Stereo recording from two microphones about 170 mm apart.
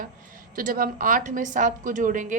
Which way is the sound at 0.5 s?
55° right (ahead or behind).